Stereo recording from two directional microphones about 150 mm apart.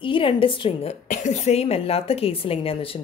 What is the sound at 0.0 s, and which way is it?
Speech, 35° left (ahead or behind).